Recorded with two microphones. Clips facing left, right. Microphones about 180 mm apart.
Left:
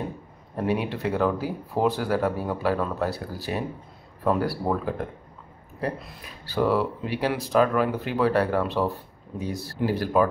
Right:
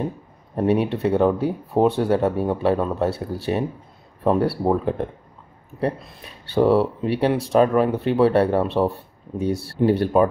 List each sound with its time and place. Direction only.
0.6 s speech: 25° right (ahead or behind)